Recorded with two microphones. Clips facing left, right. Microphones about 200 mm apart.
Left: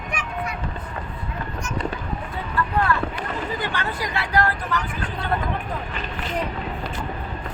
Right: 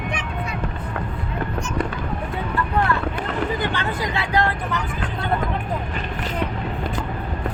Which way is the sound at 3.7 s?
20° right (ahead or behind).